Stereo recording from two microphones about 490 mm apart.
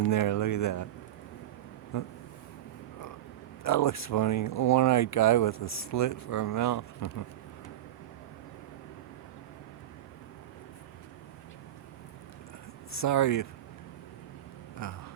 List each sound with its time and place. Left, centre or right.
0.0 s speech: left
1.9 s speech: left
3.8 s speech: left
13.0 s speech: left
14.8 s speech: left